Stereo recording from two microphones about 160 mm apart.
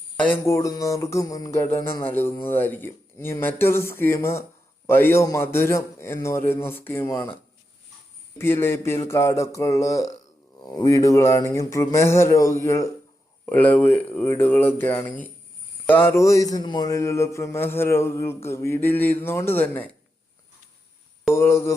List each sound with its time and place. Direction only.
0.2 s a man's voice: 15° left (ahead or behind)
8.4 s a sound: 15° left (ahead or behind)
13.4 s a man's voice: 10° left (ahead or behind)
21.3 s a man's voice: 15° left (ahead or behind)